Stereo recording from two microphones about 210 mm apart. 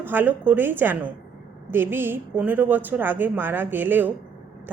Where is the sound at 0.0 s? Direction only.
10° right (ahead or behind).